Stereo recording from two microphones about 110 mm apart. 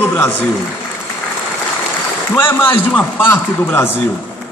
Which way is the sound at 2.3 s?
20° left (ahead or behind).